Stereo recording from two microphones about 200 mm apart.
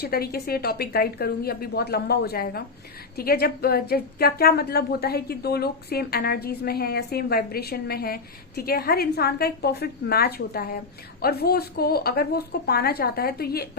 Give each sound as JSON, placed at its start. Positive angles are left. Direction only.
{"t": 0.0, "sound": "a woman's voice", "side_deg": 50}